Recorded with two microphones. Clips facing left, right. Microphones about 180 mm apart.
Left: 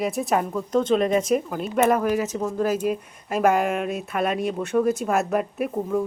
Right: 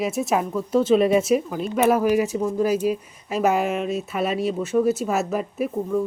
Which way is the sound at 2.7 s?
50° left (ahead or behind).